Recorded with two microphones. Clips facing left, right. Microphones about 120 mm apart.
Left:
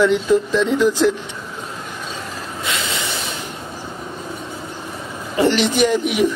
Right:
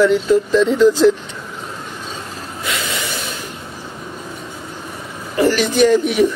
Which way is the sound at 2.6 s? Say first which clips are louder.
Right 1 dB; 25° left (ahead or behind).